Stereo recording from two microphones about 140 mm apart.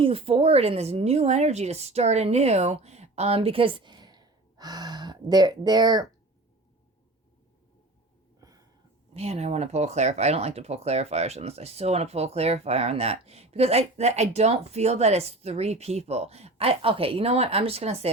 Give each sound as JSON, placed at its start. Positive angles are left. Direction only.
{"t": 0.0, "sound": "speech", "side_deg": -40}
{"t": 9.1, "sound": "speech", "side_deg": -50}